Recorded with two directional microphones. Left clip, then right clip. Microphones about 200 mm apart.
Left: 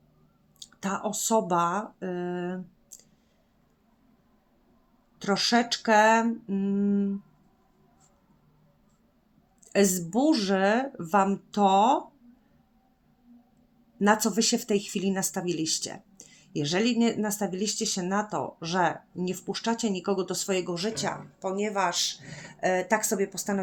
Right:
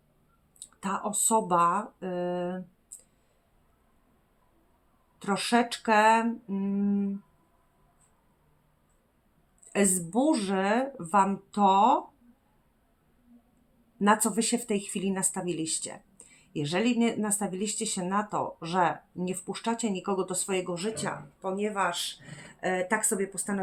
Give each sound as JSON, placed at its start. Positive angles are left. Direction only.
{"t": 0.6, "sound": "speech", "side_deg": 30}
{"t": 5.2, "sound": "speech", "side_deg": 25}
{"t": 9.6, "sound": "speech", "side_deg": 30}
{"t": 14.0, "sound": "speech", "side_deg": 30}